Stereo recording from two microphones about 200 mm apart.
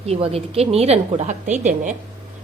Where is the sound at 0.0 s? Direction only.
30° right (ahead or behind).